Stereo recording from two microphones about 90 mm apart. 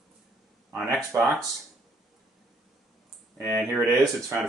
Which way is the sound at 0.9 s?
Centre (ahead or behind).